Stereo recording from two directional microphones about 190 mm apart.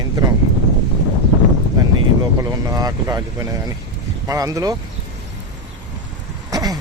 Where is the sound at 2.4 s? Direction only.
20° right (ahead or behind).